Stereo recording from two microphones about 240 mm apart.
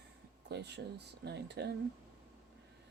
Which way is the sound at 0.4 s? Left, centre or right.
Right.